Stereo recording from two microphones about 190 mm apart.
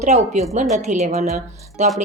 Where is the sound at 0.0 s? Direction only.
40° right (ahead or behind).